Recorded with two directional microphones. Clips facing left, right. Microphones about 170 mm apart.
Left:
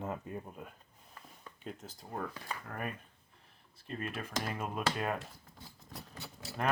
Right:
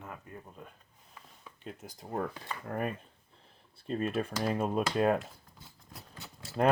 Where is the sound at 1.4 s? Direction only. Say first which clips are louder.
Even; 5° right (ahead or behind).